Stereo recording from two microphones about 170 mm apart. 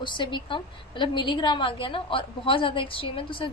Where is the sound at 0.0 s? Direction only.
30° left (ahead or behind).